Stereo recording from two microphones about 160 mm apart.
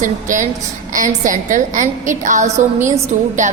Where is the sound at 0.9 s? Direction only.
55° right (ahead or behind).